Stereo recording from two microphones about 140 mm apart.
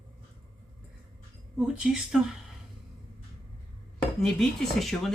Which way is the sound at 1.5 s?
5° right (ahead or behind).